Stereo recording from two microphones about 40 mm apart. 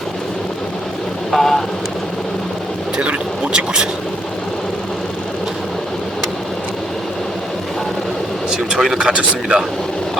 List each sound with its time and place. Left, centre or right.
1.3 s speech: centre
3.0 s a sound: right
8.4 s vehicle: centre
9.0 s speech: right